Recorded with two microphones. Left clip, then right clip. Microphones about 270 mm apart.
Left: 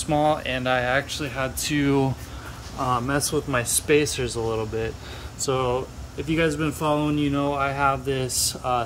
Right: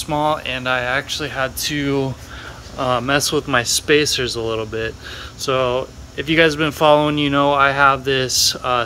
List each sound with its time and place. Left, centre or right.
0.0 s speech: centre
2.8 s speech: centre